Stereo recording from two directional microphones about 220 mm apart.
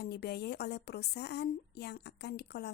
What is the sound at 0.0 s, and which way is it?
A woman's voice, 45° left (ahead or behind).